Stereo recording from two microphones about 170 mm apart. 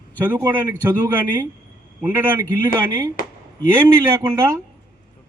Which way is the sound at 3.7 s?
15° right (ahead or behind).